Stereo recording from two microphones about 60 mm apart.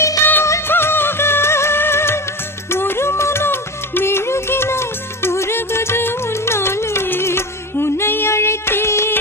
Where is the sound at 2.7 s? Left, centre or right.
Left.